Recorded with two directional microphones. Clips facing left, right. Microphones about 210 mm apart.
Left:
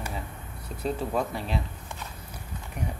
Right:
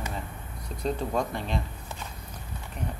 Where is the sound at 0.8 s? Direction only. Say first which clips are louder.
Even; 5° left (ahead or behind).